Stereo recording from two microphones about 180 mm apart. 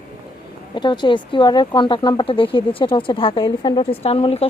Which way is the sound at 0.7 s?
25° left (ahead or behind).